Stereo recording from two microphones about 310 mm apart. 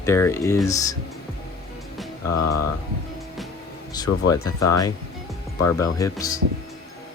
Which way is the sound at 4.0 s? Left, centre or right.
Centre.